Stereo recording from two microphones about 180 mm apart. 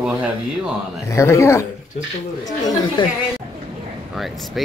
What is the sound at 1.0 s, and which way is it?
Speech, 15° left (ahead or behind).